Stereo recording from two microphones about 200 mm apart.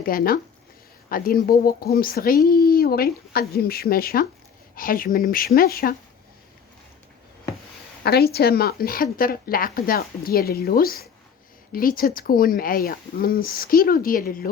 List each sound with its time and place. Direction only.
0.0 s speech: 45° left (ahead or behind)
8.0 s speech: 50° left (ahead or behind)